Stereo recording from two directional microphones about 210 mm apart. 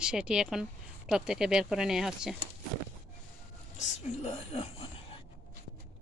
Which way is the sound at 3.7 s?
30° left (ahead or behind).